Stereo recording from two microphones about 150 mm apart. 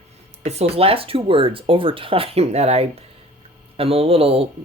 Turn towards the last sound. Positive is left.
turn(degrees=-40)  # may be behind; listen again after turning